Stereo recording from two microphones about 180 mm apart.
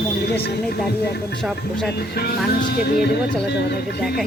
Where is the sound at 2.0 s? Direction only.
60° left (ahead or behind).